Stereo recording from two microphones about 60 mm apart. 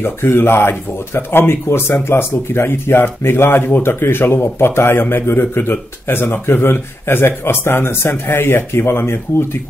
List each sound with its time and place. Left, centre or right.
0.0 s speech: left